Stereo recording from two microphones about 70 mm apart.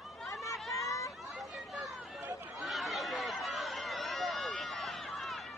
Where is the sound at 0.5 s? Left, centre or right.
Centre.